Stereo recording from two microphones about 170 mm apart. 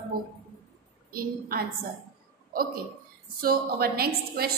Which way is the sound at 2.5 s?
60° right (ahead or behind).